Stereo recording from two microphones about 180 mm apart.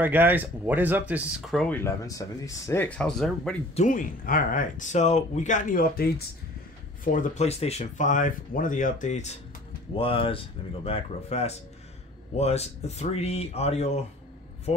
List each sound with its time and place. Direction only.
0.0 s speech: 10° right (ahead or behind)
1.5 s speech: centre (ahead or behind)
1.8 s speech: 15° left (ahead or behind)
3.7 s speech: 45° left (ahead or behind)
7.1 s speech: 40° left (ahead or behind)